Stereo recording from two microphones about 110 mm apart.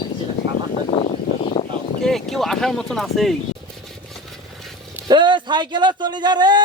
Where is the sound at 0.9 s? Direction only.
60° left (ahead or behind).